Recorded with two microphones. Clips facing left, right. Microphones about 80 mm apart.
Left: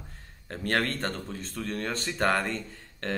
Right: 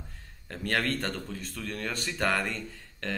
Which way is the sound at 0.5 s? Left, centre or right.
Left.